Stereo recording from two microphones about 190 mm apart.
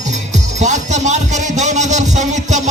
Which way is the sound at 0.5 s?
40° right (ahead or behind).